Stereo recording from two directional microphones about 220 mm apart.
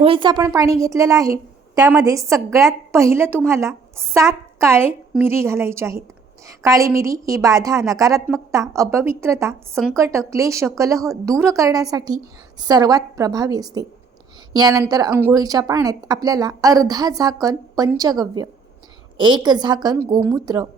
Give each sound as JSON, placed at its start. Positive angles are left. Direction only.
{"t": 0.0, "sound": "a woman's voice", "side_deg": -25}
{"t": 3.2, "sound": "a woman's voice", "side_deg": 5}
{"t": 3.5, "sound": "a woman's voice", "side_deg": -10}